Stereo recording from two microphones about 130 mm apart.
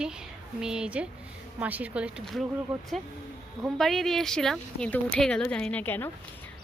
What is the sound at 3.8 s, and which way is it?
Speech, centre (ahead or behind).